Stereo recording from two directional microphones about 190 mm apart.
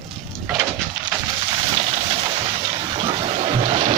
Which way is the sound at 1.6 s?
30° right (ahead or behind).